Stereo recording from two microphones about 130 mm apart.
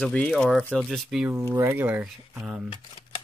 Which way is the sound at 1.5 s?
15° right (ahead or behind).